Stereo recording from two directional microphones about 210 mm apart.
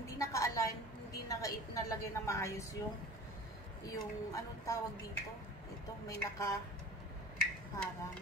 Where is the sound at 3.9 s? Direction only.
15° left (ahead or behind).